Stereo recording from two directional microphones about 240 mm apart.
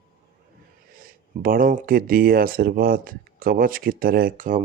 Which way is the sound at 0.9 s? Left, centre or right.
Right.